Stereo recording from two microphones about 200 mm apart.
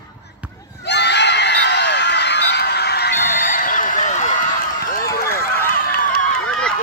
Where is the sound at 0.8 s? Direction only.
60° left (ahead or behind); by 6.1 s 45° left (ahead or behind).